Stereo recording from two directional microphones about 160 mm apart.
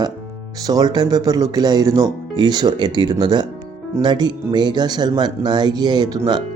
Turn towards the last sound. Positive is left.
turn(degrees=-25)  # may be behind; listen again after turning